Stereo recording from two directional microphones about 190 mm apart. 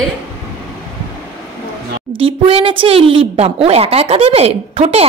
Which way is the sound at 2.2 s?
30° right (ahead or behind).